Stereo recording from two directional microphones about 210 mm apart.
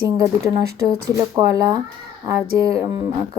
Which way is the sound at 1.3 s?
20° right (ahead or behind).